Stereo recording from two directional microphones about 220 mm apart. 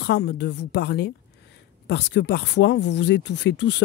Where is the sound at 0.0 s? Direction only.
50° left (ahead or behind).